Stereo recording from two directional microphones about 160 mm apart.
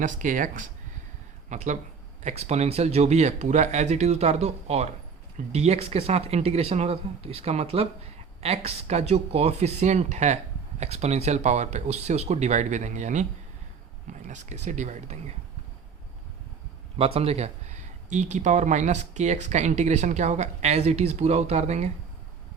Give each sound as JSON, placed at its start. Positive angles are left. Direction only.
{"t": 0.0, "sound": "speech", "side_deg": -55}
{"t": 14.3, "sound": "speech", "side_deg": -50}
{"t": 17.2, "sound": "speech", "side_deg": -40}